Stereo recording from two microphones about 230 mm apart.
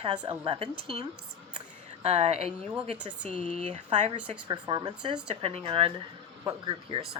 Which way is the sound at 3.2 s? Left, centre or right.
Left.